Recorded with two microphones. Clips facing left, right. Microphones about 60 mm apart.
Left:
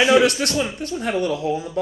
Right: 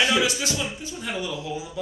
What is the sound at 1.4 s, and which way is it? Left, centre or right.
Speech, left.